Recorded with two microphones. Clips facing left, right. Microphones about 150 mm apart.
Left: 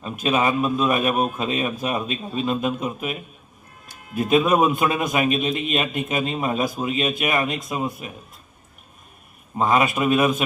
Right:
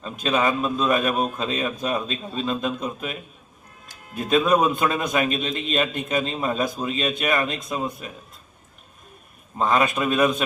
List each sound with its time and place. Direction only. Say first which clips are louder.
0.0 s a man's voice: left 1 dB; 20° left (ahead or behind)
4.2 s a man's voice: left 2 dB; 20° left (ahead or behind)
9.6 s a man's voice: left 1 dB; 20° left (ahead or behind)